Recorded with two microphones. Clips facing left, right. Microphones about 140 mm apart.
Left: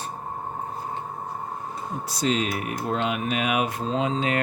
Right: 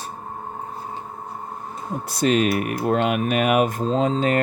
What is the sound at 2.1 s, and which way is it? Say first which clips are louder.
Speech: right 6 dB; 60° right (ahead or behind).